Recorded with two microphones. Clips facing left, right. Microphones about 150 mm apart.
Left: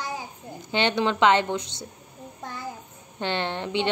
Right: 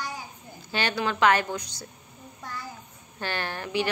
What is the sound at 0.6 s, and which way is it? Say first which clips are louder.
A child's voice: left 5 dB; 20° left (ahead or behind).